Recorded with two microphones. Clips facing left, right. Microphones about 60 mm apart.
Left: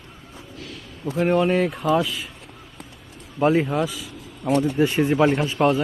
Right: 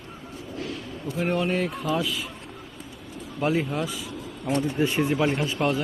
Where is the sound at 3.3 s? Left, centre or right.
Left.